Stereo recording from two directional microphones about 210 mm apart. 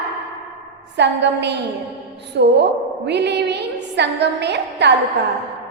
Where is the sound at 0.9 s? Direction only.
55° right (ahead or behind).